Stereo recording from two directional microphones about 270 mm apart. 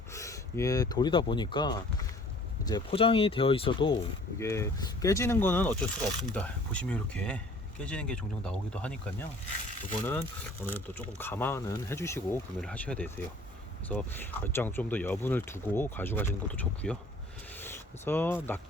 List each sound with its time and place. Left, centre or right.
0.1 s speech: centre
10.0 s speech: centre
17.5 s a sound: centre